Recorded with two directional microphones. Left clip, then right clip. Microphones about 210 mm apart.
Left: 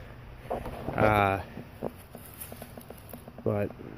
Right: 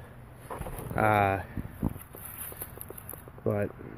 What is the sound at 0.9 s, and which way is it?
Speech, centre (ahead or behind).